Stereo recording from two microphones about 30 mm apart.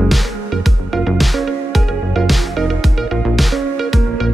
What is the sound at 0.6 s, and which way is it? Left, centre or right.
Music, centre.